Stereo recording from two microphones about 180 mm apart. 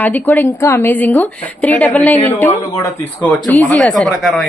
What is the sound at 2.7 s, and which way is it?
Speech, 20° left (ahead or behind).